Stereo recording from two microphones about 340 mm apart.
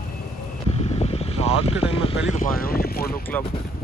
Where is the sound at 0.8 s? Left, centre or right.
Centre.